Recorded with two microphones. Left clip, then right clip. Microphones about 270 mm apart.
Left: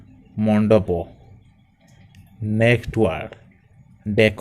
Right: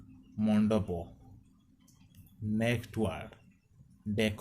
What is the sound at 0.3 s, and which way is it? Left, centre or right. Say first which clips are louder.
Speech: left 14 dB; left.